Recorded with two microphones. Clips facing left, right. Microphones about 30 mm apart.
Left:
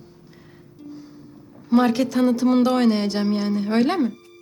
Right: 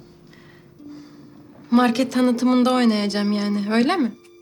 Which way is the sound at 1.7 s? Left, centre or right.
Centre.